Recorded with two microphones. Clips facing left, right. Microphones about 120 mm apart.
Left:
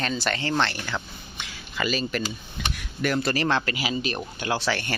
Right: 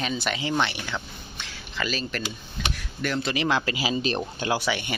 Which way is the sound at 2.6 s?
5° left (ahead or behind).